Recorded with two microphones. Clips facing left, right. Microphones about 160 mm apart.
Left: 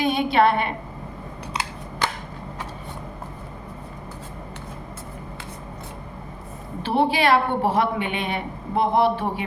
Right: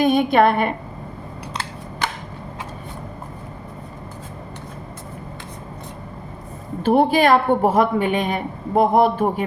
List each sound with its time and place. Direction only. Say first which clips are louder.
0.0 s speech: right 4 dB; 50° right (ahead or behind)
6.8 s speech: right 5 dB; 45° right (ahead or behind)